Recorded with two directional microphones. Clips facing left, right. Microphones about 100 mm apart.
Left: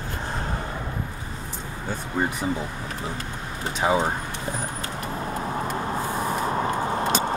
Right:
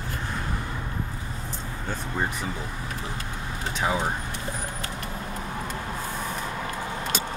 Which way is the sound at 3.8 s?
25° left (ahead or behind).